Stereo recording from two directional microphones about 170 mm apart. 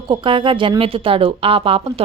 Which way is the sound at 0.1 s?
30° right (ahead or behind).